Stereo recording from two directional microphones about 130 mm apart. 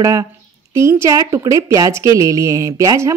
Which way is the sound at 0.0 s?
25° right (ahead or behind).